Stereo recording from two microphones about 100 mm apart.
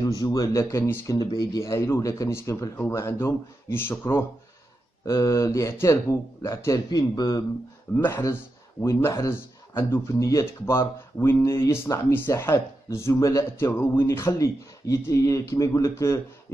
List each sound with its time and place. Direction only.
0.0 s a man's voice: 35° left (ahead or behind)
7.9 s speech: 20° left (ahead or behind)
8.8 s speech: 30° left (ahead or behind)